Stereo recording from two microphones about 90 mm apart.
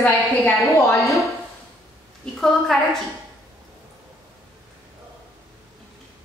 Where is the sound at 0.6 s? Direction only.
35° left (ahead or behind).